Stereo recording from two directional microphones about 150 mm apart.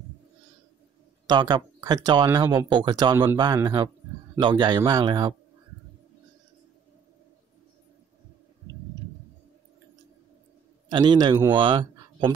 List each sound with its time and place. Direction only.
1.3 s a man's voice: 30° right (ahead or behind)
10.9 s a man's voice: 30° right (ahead or behind)
11.5 s a sound: 35° right (ahead or behind)